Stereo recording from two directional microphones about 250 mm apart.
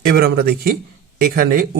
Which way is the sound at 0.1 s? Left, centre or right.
Right.